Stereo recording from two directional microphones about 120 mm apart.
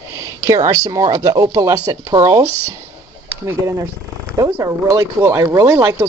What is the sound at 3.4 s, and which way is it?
Speech, 25° right (ahead or behind).